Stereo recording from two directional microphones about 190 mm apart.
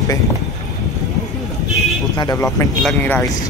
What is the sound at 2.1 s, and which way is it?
Speech, 20° left (ahead or behind).